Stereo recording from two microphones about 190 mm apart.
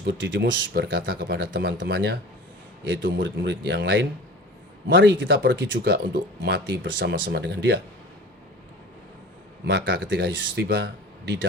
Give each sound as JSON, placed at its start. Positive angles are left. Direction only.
{"t": 0.0, "sound": "speech", "side_deg": -75}
{"t": 9.6, "sound": "speech", "side_deg": -75}